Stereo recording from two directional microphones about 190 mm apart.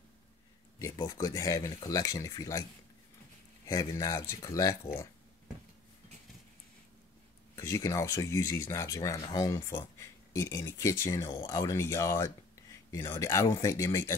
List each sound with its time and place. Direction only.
0.7 s speech: 15° left (ahead or behind)
3.6 s speech: 20° left (ahead or behind)
7.5 s speech: 15° left (ahead or behind)